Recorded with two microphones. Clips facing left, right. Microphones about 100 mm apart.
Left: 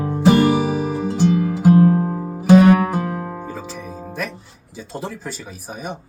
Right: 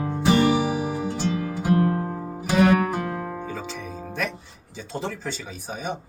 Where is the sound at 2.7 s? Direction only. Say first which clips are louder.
Left 4 dB; 35° left (ahead or behind).